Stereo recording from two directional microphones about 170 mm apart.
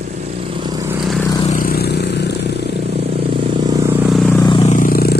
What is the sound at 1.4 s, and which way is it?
Vehicle, 55° left (ahead or behind).